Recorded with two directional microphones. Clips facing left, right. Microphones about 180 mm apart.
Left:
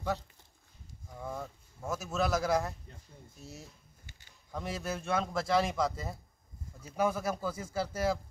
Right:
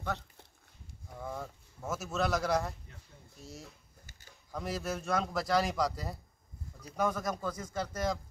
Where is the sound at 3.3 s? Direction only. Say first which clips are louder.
Right 1 dB; centre (ahead or behind).